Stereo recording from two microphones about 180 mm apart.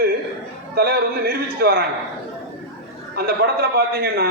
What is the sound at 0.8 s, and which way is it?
A man's voice, 60° right (ahead or behind).